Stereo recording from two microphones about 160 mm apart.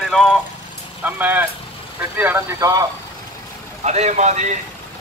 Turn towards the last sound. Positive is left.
turn(degrees=-45)  # may be behind; listen again after turning